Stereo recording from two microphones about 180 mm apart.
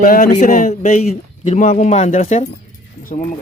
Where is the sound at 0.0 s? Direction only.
45° left (ahead or behind).